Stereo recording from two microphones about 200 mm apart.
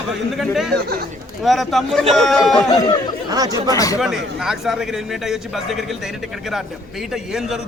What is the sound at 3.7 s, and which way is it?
Speech, 15° left (ahead or behind).